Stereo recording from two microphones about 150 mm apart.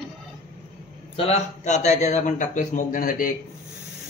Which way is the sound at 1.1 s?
45° left (ahead or behind).